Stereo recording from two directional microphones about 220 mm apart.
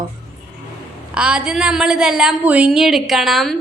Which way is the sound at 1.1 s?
5° right (ahead or behind).